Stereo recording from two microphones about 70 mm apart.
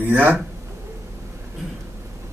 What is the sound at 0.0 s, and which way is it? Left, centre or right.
Speech, right.